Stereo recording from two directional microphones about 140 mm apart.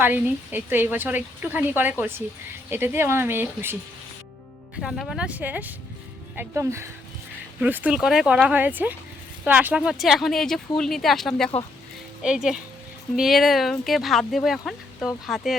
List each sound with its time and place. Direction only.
0.0 s speech: 15° right (ahead or behind)
4.8 s speech: centre (ahead or behind)